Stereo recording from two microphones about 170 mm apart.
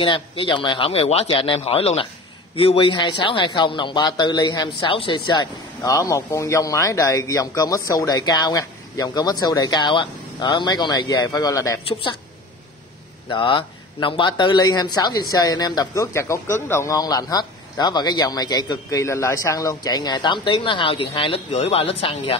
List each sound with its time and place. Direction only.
0.0 s speech: 30° left (ahead or behind)
13.3 s speech: 30° left (ahead or behind)